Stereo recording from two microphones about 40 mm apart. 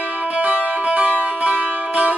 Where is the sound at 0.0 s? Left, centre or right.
Right.